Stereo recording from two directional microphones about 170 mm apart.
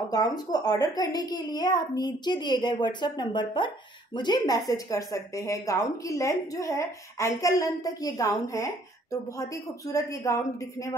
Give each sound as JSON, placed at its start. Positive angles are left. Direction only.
{"t": 0.1, "sound": "a child's voice", "side_deg": 20}